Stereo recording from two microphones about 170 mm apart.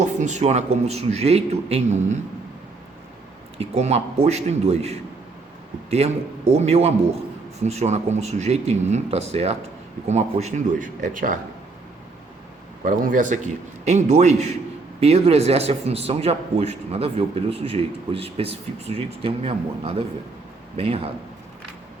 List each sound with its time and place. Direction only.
0.0 s a man's voice: 45° right (ahead or behind)
3.6 s a man's voice: 40° right (ahead or behind)
12.8 s a man's voice: 55° right (ahead or behind); by 21.1 s 35° right (ahead or behind)